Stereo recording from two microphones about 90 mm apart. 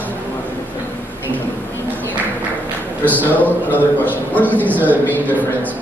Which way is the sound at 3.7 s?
20° left (ahead or behind).